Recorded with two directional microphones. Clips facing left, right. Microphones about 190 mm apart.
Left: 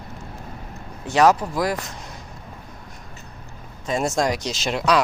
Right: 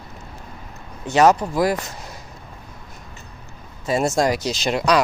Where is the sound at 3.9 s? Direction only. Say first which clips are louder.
Right 3 dB; centre (ahead or behind).